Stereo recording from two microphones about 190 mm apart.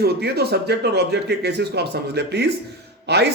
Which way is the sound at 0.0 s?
60° right (ahead or behind).